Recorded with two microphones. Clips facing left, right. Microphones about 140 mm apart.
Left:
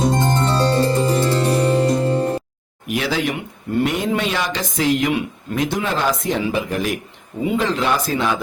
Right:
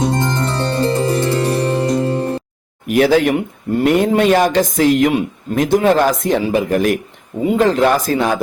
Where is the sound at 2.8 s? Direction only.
50° right (ahead or behind).